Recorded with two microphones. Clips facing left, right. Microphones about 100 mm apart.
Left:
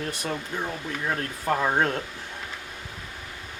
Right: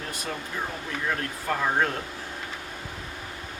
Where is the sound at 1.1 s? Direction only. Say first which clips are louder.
Left 5 dB; 30° left (ahead or behind).